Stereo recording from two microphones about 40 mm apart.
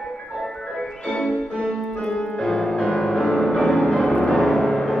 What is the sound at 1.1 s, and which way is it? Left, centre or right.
Music, left.